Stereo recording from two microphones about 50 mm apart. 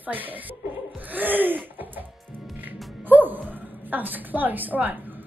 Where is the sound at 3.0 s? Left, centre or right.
Right.